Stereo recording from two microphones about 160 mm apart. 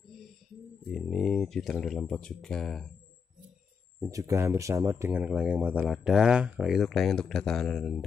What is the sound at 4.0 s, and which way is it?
Speech, 20° right (ahead or behind).